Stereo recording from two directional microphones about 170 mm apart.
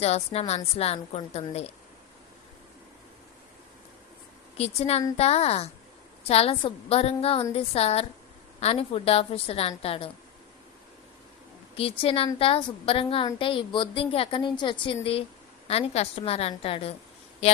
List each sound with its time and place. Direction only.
0.0 s a woman's voice: 40° left (ahead or behind)
4.5 s a woman's voice: 40° left (ahead or behind)
11.8 s a woman's voice: 35° left (ahead or behind)